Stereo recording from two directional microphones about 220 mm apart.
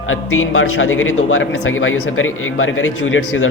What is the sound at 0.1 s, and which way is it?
A man's voice, 65° left (ahead or behind).